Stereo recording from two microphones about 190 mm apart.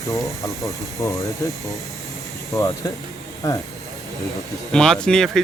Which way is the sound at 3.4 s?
15° left (ahead or behind).